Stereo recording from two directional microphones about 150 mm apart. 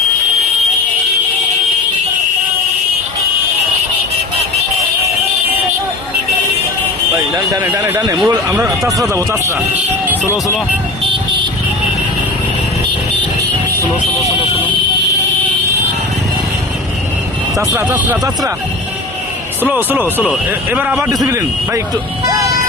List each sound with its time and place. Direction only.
7.3 s alarm: 20° right (ahead or behind)
7.8 s speech: 20° right (ahead or behind)
17.6 s speech: 15° right (ahead or behind)
19.7 s speech: 15° right (ahead or behind)